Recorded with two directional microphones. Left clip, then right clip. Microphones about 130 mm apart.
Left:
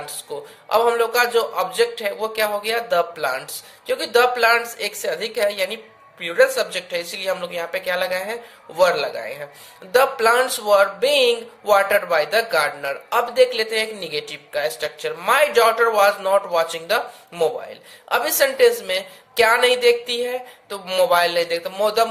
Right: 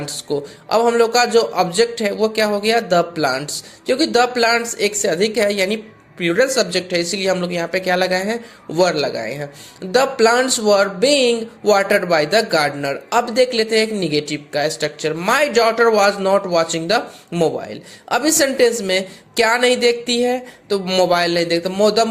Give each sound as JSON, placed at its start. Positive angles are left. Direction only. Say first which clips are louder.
{"t": 0.0, "sound": "speech", "louder": "right 8 dB", "side_deg": -35}